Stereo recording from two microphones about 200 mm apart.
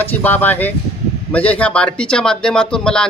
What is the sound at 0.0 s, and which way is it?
Speech, 10° left (ahead or behind).